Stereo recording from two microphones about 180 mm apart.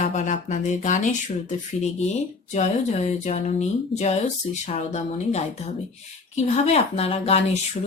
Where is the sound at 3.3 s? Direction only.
40° left (ahead or behind).